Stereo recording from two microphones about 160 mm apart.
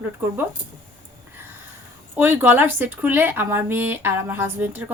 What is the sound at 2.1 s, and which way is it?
Speech, 15° right (ahead or behind).